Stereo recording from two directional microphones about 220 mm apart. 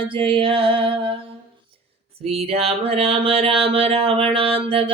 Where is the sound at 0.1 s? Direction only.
25° right (ahead or behind).